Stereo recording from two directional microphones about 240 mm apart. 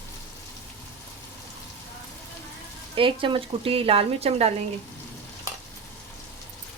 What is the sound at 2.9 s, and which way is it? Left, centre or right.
Speech, right.